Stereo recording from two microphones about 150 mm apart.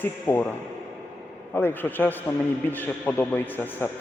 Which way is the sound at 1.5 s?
15° left (ahead or behind).